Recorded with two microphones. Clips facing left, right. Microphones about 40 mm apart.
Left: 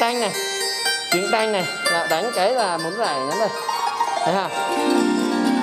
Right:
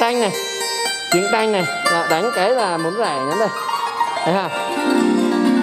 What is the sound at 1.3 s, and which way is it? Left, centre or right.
Speech, centre.